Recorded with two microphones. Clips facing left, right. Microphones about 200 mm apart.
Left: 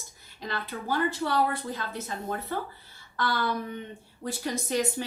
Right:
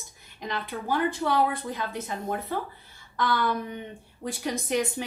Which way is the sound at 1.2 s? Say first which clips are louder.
Right 2 dB; 15° right (ahead or behind).